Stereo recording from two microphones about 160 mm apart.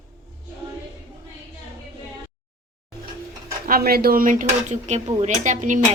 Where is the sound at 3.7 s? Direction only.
70° right (ahead or behind).